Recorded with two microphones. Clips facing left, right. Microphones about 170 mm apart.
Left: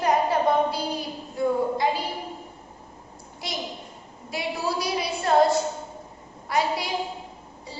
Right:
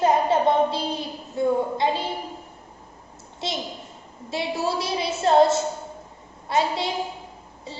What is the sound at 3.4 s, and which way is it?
A child's voice, 25° right (ahead or behind).